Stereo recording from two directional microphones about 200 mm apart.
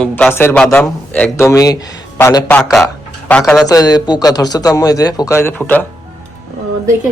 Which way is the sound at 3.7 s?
20° left (ahead or behind).